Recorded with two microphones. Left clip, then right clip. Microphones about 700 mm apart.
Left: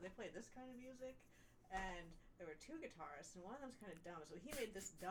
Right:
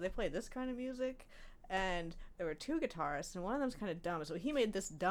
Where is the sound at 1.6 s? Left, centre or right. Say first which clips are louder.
Right 12 dB; right.